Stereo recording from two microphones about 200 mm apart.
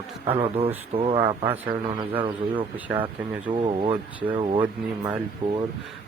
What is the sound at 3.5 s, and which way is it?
Speech, 25° right (ahead or behind).